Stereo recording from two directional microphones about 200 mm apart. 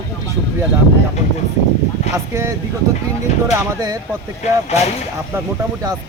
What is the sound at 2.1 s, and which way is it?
Speech, 15° right (ahead or behind).